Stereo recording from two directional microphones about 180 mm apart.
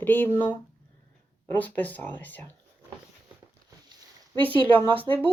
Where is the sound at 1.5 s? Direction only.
10° left (ahead or behind).